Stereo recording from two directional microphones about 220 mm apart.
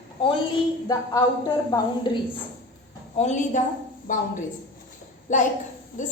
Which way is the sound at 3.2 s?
35° left (ahead or behind).